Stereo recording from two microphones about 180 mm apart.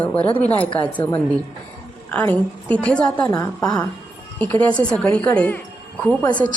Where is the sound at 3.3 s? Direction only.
20° left (ahead or behind).